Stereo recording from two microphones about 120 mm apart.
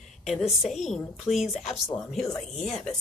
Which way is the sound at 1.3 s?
60° left (ahead or behind).